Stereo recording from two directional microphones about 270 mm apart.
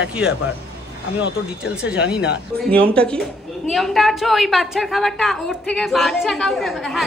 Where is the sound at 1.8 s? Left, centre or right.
Centre.